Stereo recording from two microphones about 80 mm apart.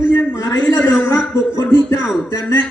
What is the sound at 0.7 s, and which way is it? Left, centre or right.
Speech, left.